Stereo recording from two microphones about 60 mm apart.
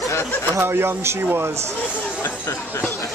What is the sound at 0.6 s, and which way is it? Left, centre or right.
Speech, right.